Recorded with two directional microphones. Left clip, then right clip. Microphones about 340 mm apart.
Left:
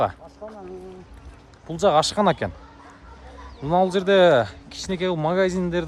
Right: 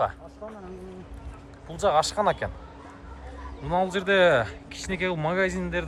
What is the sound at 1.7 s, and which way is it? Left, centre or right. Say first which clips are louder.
Speech: left 4 dB; centre.